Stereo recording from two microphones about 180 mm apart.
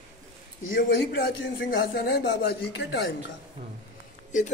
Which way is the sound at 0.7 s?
65° left (ahead or behind).